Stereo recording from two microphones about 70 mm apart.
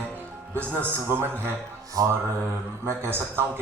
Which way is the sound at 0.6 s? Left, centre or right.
Left.